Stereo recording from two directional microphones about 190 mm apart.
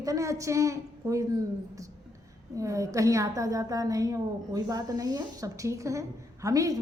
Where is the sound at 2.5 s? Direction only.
15° right (ahead or behind).